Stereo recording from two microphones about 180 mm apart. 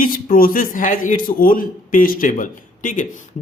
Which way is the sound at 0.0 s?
50° left (ahead or behind).